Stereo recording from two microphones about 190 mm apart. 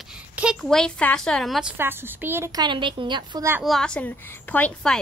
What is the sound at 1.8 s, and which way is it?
A woman's voice, 10° right (ahead or behind).